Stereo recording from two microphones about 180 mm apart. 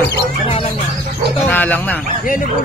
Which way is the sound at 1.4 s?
10° left (ahead or behind).